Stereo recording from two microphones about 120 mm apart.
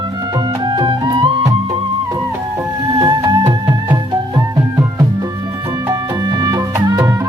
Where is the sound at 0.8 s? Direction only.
40° right (ahead or behind).